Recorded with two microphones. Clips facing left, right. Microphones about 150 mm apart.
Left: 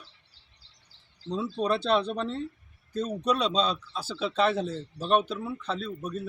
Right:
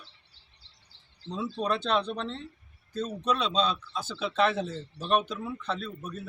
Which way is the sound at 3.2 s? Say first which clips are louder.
Left 1 dB; 40° left (ahead or behind).